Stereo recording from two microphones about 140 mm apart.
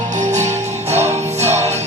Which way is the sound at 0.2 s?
60° right (ahead or behind).